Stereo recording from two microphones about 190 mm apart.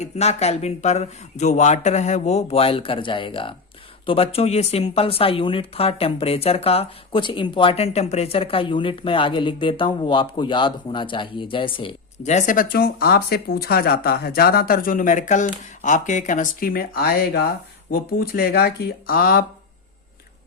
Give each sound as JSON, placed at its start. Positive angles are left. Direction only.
{"t": 0.0, "sound": "speech", "side_deg": 35}